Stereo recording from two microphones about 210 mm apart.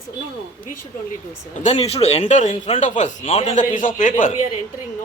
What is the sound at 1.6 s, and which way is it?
Speech, 30° left (ahead or behind).